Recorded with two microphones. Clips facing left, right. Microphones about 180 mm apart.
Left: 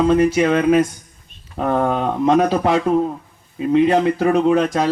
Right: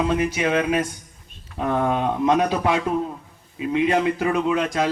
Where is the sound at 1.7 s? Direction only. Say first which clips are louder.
Left 3 dB; 45° left (ahead or behind).